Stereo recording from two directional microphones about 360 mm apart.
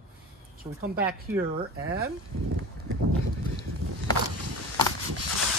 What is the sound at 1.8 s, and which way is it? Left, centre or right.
Speech, right.